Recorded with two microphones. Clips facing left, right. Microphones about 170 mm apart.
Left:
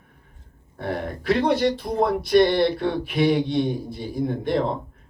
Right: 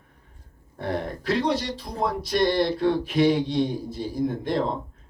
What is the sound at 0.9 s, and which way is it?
Speech, 60° left (ahead or behind).